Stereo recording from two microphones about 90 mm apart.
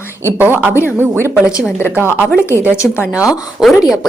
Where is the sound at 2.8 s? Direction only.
30° left (ahead or behind).